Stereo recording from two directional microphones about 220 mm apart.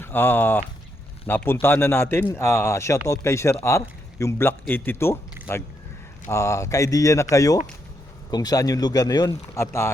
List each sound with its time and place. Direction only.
0.0 s a man's voice: 10° left (ahead or behind)